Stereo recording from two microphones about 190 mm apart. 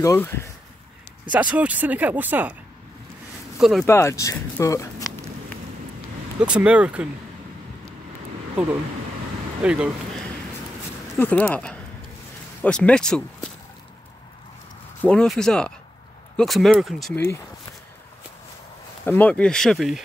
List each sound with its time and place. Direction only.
0.0 s speech: 10° left (ahead or behind)
1.3 s speech: 5° right (ahead or behind)
3.5 s speech: centre (ahead or behind)
3.8 s speech: 15° left (ahead or behind)
6.4 s speech: 5° right (ahead or behind)
9.6 s speech: 5° right (ahead or behind)
11.1 s speech: 10° left (ahead or behind)
15.0 s speech: 5° left (ahead or behind)
19.0 s speech: 10° left (ahead or behind)